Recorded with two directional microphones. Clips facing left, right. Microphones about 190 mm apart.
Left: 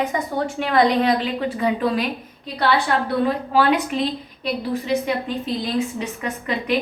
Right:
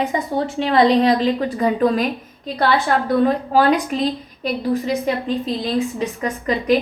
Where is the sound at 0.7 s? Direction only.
30° right (ahead or behind).